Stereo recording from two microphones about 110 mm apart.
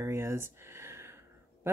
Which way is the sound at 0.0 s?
25° right (ahead or behind).